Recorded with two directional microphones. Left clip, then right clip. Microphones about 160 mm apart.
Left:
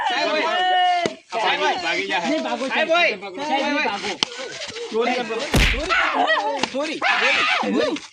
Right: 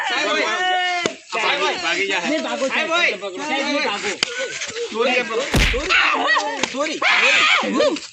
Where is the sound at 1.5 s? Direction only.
15° left (ahead or behind).